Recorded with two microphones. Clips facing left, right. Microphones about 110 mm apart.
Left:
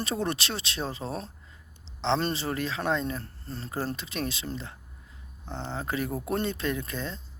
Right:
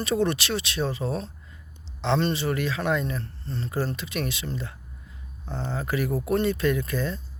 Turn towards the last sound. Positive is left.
turn(degrees=25)  # may be behind; listen again after turning